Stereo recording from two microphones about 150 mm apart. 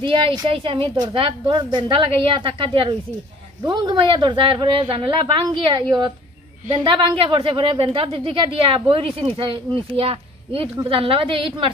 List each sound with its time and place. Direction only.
0.0 s a woman's voice: 35° right (ahead or behind)